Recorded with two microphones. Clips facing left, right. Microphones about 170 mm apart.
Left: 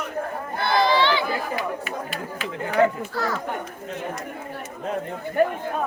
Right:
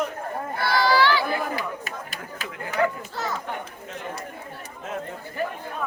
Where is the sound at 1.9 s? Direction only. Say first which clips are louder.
Left 5 dB; 40° right (ahead or behind).